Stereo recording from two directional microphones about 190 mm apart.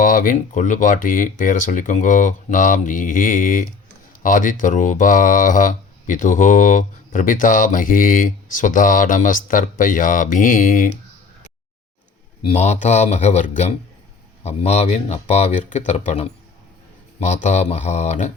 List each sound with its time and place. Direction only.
0.0 s speech: 45° left (ahead or behind)
12.5 s speech: 35° left (ahead or behind)